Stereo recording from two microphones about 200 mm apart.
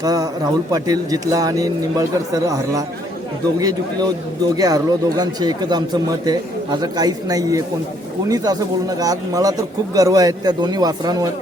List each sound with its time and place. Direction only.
0.0 s a man's voice: 20° right (ahead or behind)